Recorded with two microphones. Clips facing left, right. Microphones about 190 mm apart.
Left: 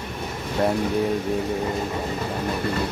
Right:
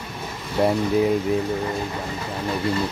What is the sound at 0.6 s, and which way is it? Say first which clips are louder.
Speech: right 2 dB; 5° right (ahead or behind).